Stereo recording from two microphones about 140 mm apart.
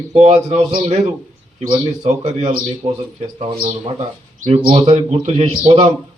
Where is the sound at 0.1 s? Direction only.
55° right (ahead or behind).